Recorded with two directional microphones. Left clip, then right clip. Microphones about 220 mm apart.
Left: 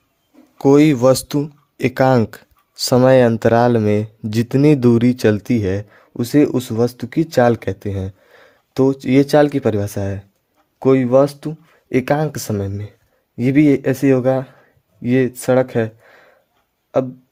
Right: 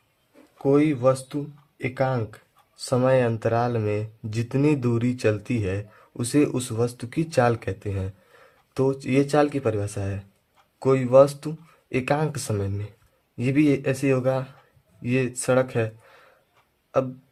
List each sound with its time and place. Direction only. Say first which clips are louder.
0.6 s speech: left 8 dB; 50° left (ahead or behind); by 16.3 s 30° left (ahead or behind)